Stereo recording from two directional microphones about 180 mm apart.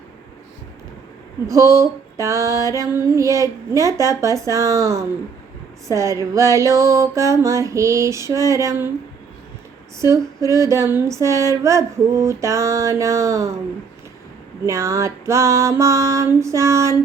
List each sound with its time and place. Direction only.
1.5 s music: 15° right (ahead or behind)
10.0 s music: 15° right (ahead or behind)
14.7 s music: 15° right (ahead or behind)